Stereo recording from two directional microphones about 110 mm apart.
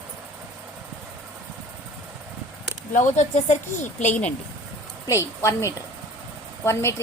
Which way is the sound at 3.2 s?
90° left.